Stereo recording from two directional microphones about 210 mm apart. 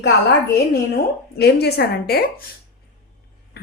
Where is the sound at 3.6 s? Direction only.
50° left (ahead or behind).